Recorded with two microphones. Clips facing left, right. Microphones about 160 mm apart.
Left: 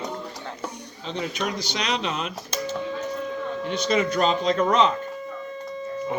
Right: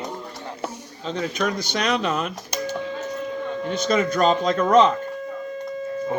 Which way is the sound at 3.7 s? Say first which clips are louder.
Right 2 dB; 45° right (ahead or behind).